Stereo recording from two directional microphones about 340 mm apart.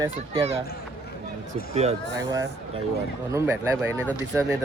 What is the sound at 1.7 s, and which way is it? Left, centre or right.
Speech, centre.